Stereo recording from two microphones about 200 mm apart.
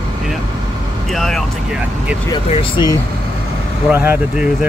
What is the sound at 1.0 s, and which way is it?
Speech, centre (ahead or behind).